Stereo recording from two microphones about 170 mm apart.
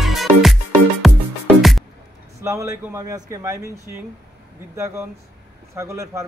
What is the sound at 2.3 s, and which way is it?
Speech, 20° right (ahead or behind).